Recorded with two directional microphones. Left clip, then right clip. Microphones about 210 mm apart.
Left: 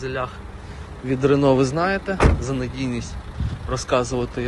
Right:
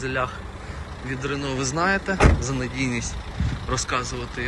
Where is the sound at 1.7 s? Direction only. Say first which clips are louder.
Even; centre (ahead or behind).